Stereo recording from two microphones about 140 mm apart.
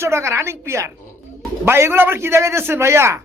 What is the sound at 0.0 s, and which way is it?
A man's voice, 20° right (ahead or behind).